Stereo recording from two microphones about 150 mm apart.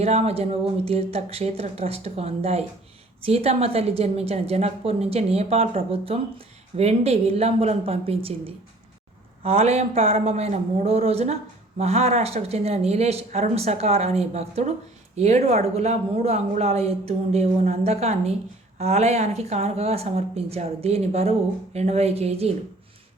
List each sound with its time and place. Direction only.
0.0 s a woman's voice: 45° right (ahead or behind)